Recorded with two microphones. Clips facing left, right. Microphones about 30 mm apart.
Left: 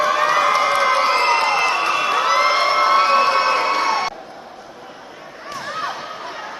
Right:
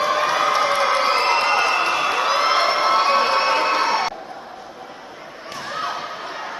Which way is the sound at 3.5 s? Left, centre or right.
Centre.